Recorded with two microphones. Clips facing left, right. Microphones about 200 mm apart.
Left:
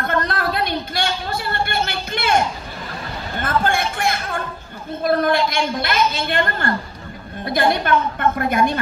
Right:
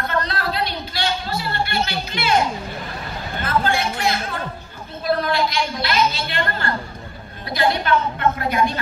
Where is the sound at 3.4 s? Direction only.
50° left (ahead or behind).